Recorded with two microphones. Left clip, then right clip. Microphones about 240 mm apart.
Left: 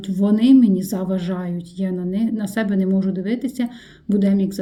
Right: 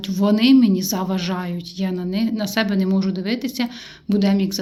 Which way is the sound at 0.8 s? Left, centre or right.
Centre.